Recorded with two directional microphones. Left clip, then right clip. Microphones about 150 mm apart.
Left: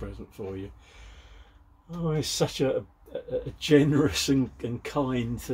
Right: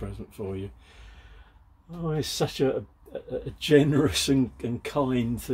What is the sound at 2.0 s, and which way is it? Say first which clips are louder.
Speech: left 1 dB; 25° right (ahead or behind).